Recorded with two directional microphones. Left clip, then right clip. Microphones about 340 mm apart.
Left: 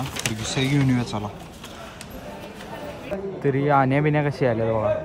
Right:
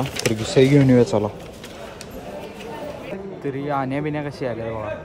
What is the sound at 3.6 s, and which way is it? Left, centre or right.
Speech, right.